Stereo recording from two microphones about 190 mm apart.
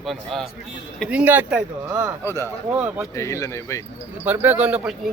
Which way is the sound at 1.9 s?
20° right (ahead or behind).